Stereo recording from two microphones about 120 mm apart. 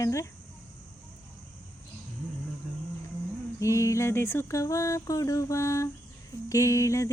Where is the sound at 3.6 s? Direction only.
25° left (ahead or behind).